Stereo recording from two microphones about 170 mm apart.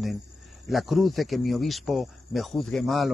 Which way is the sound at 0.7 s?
Centre (ahead or behind).